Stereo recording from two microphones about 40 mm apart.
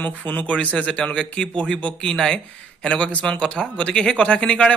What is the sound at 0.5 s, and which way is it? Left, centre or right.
Speech, left.